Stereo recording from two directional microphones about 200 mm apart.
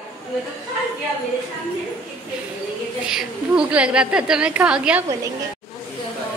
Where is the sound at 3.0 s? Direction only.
5° right (ahead or behind).